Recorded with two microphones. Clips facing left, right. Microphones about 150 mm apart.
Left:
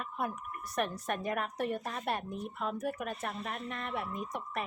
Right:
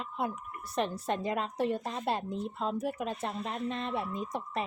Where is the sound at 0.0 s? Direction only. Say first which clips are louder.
Right 2 dB; 25° right (ahead or behind).